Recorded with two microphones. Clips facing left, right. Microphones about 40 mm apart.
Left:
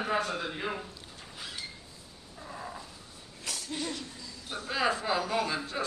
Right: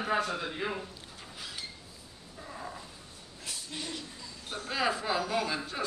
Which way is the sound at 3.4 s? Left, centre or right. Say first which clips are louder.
Left 3 dB; left.